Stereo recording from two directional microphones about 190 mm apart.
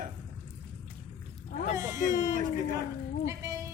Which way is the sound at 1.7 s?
15° right (ahead or behind).